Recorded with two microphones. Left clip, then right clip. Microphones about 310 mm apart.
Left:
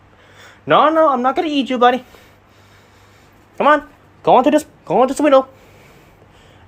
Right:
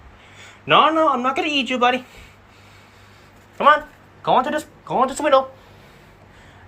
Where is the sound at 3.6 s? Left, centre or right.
Left.